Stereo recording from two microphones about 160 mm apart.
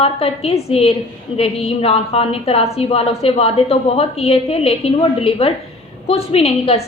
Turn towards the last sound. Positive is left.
turn(degrees=40)  # may be behind; listen again after turning